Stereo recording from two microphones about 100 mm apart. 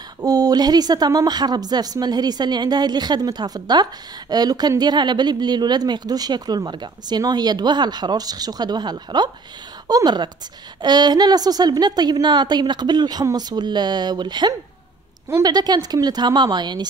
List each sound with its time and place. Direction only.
0.2 s speech: 40° right (ahead or behind)